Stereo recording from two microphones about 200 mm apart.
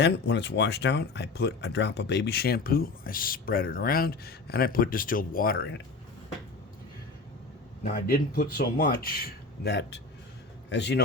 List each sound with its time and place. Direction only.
0.0 s speech: 60° left (ahead or behind)
8.1 s a man's voice: 45° left (ahead or behind)